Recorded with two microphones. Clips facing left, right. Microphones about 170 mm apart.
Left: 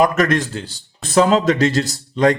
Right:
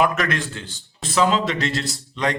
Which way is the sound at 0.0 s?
40° left (ahead or behind).